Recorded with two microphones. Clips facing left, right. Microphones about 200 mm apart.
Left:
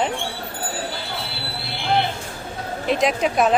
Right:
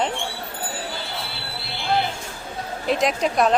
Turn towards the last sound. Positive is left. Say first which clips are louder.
# left 1 dB
turn(degrees=5)  # may be behind; listen again after turning